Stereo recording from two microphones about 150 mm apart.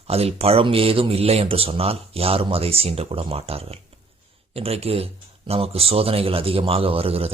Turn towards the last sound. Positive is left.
turn(degrees=-40)  # may be behind; listen again after turning